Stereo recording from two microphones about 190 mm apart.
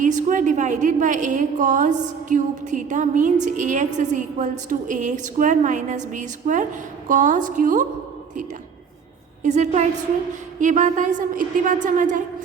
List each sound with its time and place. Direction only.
0.0 s a woman's voice: 40° right (ahead or behind)
9.4 s a woman's voice: 40° right (ahead or behind)